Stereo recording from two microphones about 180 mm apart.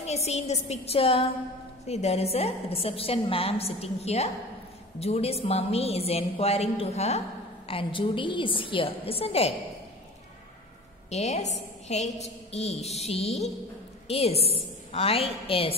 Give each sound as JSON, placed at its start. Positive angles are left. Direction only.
{"t": 0.0, "sound": "a woman's voice", "side_deg": 35}
{"t": 11.1, "sound": "a woman's voice", "side_deg": 40}